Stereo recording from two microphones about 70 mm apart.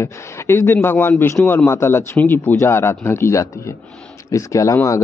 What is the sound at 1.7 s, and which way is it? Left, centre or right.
Speech, left.